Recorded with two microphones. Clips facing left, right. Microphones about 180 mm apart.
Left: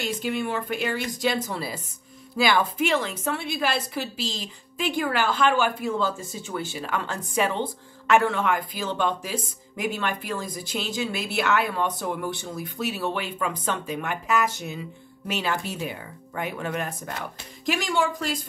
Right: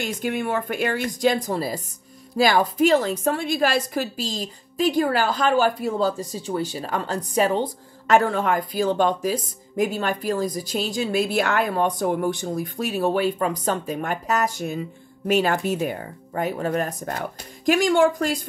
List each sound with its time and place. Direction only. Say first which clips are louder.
0.0 s a woman's voice: right 2 dB; 50° right (ahead or behind)